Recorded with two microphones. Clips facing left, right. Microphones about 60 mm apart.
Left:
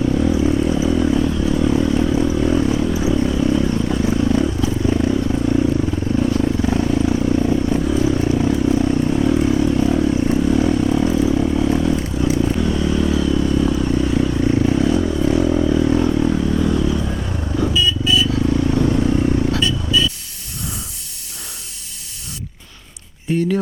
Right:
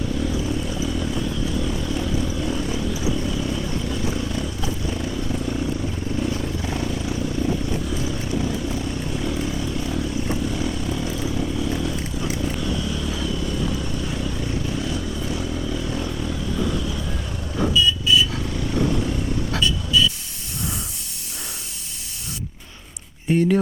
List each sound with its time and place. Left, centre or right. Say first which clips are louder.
0.1 s vehicle: left 8 dB; left